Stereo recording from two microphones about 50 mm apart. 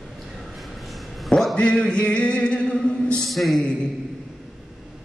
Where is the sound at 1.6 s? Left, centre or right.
Left.